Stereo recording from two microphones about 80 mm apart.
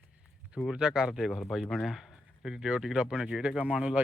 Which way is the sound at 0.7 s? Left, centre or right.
Centre.